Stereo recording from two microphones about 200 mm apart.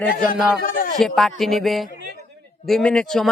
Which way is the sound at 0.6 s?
40° left (ahead or behind).